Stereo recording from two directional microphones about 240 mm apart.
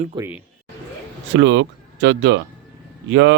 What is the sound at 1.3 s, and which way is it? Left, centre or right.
Speech, right.